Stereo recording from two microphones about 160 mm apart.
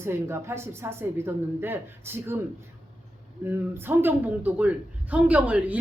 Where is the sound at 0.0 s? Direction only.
15° right (ahead or behind).